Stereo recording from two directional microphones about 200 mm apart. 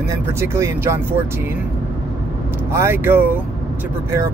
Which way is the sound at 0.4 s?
15° right (ahead or behind).